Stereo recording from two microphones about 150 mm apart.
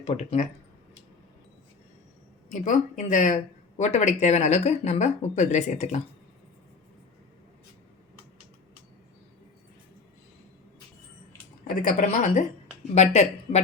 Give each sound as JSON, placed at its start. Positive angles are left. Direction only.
{"t": 0.0, "sound": "speech", "side_deg": 45}
{"t": 2.5, "sound": "speech", "side_deg": 60}
{"t": 11.7, "sound": "speech", "side_deg": 65}